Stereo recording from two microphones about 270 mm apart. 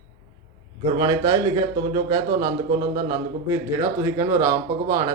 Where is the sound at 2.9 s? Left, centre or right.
Centre.